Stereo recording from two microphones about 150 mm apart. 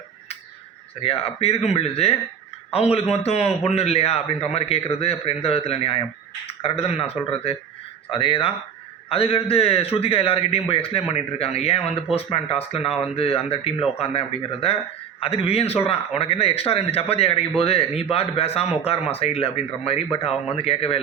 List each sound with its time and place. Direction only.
1.0 s a man's voice: 40° left (ahead or behind)